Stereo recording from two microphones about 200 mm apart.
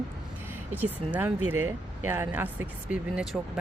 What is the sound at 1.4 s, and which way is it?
Speech, 90° right.